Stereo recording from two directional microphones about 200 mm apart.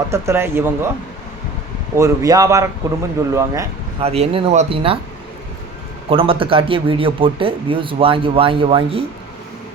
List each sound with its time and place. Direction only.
0.1 s a man's voice: 15° right (ahead or behind)
2.0 s a man's voice: 15° right (ahead or behind)
4.0 s speech: 30° right (ahead or behind)
6.1 s speech: 25° right (ahead or behind)